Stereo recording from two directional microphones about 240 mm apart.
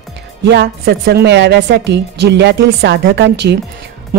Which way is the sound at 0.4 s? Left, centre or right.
Right.